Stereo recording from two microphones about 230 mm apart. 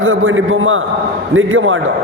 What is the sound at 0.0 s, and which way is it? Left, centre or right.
A man's voice, right.